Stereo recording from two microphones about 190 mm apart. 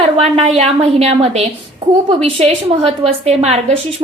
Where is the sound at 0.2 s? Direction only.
30° right (ahead or behind).